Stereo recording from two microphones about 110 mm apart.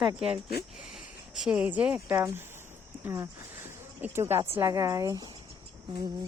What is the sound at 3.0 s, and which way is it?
Speech, 25° right (ahead or behind).